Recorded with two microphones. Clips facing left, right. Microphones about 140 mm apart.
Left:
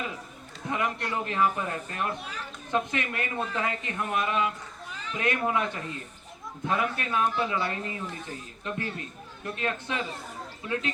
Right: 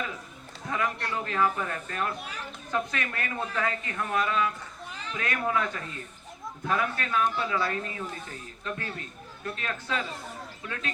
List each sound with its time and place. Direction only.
0.7 s speech: 20° left (ahead or behind)